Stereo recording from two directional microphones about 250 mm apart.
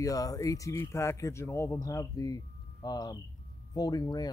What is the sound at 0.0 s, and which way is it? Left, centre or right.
Speech, centre.